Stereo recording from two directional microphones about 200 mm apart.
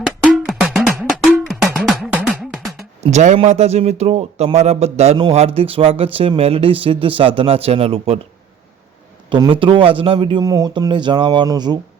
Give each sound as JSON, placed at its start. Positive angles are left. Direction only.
{"t": 0.0, "sound": "music", "side_deg": 0}
{"t": 3.0, "sound": "speech", "side_deg": -35}
{"t": 9.3, "sound": "speech", "side_deg": -25}